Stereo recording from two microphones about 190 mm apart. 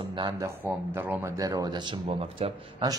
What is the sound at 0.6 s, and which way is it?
A man's voice, 10° right (ahead or behind).